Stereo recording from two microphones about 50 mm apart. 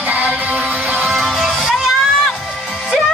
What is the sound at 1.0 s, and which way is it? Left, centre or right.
Music, centre.